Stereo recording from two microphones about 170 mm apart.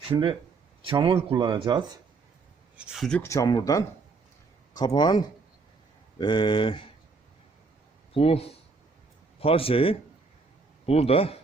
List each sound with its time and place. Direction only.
0.1 s speech: 25° right (ahead or behind)
2.7 s speech: centre (ahead or behind)
3.2 s speech: 20° left (ahead or behind)
4.9 s speech: 25° left (ahead or behind)
8.1 s speech: 35° left (ahead or behind)